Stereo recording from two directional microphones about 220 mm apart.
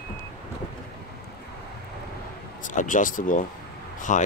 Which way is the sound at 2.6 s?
35° left (ahead or behind).